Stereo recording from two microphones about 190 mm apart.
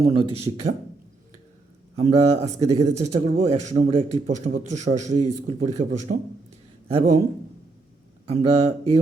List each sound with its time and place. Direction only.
0.0 s a man's voice: 35° right (ahead or behind)
2.0 s a man's voice: 35° right (ahead or behind)
8.3 s a man's voice: 35° right (ahead or behind)